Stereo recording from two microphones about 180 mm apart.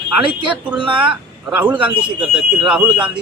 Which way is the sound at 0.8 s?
30° right (ahead or behind).